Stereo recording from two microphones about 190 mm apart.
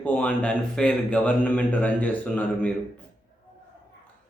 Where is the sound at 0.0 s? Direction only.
10° left (ahead or behind).